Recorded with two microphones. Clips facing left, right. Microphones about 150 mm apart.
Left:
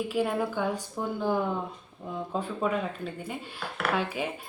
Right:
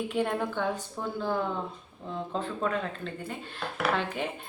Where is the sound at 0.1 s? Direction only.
5° left (ahead or behind).